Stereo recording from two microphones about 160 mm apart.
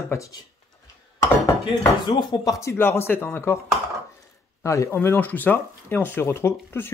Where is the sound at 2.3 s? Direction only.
20° left (ahead or behind).